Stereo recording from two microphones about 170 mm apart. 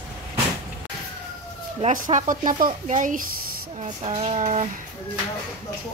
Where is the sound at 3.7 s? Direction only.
40° right (ahead or behind).